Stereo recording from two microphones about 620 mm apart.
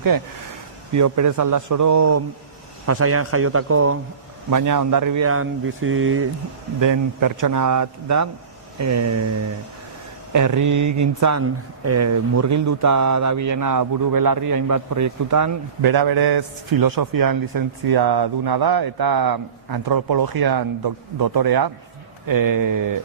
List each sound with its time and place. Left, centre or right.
0.9 s a man's voice: right
6.7 s a man's voice: right
10.3 s a man's voice: right